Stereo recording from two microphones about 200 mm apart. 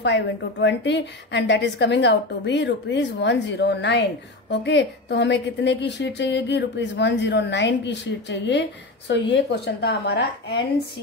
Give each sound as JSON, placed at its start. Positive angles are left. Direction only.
{"t": 0.0, "sound": "a woman's voice", "side_deg": 60}